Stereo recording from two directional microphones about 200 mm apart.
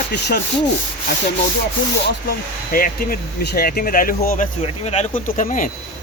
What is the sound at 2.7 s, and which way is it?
Speech, 45° left (ahead or behind).